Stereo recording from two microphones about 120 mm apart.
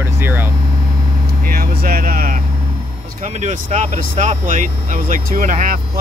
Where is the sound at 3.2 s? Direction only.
85° right.